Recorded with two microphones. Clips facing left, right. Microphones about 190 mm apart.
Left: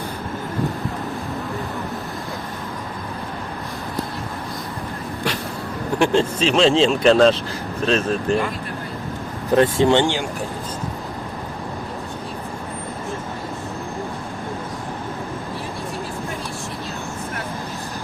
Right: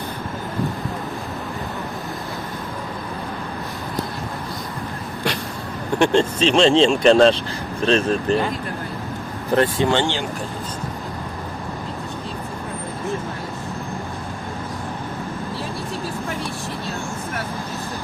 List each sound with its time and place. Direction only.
6.0 s speech: 5° left (ahead or behind)
9.6 s speech: 20° left (ahead or behind)